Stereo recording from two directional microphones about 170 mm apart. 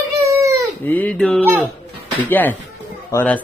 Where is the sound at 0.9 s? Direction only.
10° left (ahead or behind).